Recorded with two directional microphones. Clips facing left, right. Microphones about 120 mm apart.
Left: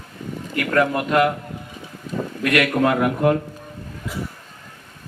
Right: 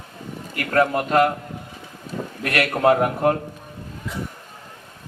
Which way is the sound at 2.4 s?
40° right (ahead or behind).